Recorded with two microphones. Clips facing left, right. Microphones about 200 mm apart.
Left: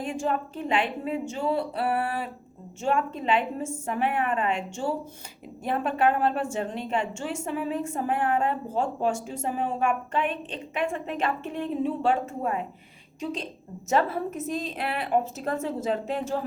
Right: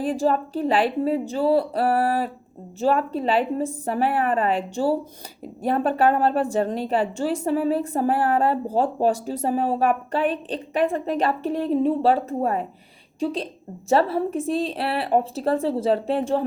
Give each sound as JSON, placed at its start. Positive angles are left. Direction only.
{"t": 0.0, "sound": "a woman's voice", "side_deg": -35}